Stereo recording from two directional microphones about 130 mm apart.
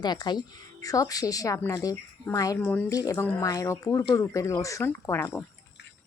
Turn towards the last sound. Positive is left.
turn(degrees=15)  # may be behind; listen again after turning